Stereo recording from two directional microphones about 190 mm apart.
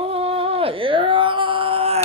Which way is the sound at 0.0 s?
30° right (ahead or behind).